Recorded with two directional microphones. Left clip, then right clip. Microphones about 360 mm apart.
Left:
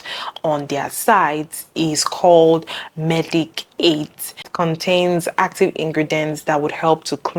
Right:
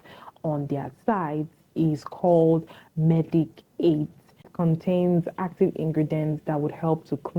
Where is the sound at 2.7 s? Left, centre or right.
Centre.